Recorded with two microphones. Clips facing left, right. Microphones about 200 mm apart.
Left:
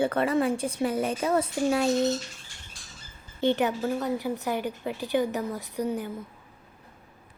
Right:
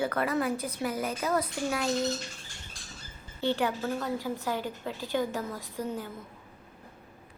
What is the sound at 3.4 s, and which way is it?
A woman's voice, 20° left (ahead or behind).